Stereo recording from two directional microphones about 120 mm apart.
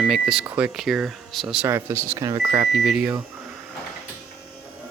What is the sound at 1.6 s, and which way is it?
Speech, 20° right (ahead or behind).